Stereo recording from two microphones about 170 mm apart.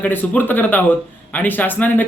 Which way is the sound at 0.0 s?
10° left (ahead or behind).